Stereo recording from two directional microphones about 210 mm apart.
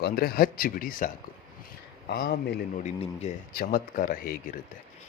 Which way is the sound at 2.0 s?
50° left (ahead or behind).